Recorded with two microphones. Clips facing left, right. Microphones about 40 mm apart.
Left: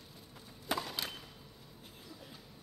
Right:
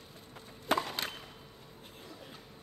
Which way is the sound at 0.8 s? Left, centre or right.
Right.